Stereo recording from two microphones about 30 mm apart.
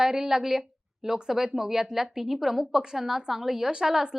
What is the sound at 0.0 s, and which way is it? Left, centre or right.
A woman's voice, centre.